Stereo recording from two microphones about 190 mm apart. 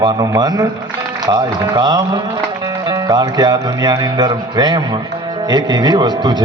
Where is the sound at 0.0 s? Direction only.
20° right (ahead or behind).